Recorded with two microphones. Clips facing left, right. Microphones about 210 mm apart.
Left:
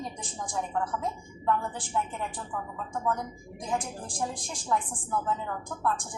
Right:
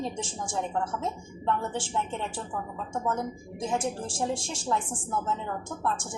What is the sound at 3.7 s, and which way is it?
Speech, 25° right (ahead or behind).